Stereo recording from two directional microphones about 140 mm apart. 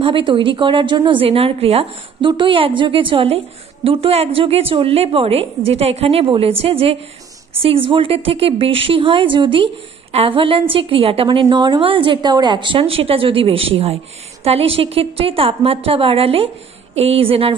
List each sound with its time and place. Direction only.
0.0 s a woman's voice: 35° right (ahead or behind)